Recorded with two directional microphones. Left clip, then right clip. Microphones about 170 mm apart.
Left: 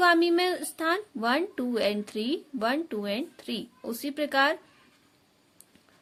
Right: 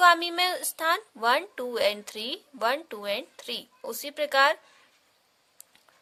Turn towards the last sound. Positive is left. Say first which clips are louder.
# right 2 dB
turn(degrees=-20)  # may be behind; listen again after turning